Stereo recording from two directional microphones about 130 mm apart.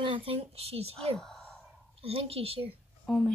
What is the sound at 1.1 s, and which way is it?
Speech, centre (ahead or behind).